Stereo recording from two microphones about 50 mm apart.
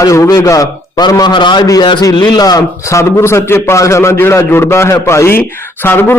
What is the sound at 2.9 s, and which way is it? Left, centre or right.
A man's voice, left.